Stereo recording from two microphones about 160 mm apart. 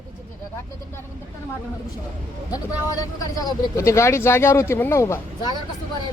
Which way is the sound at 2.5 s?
20° left (ahead or behind).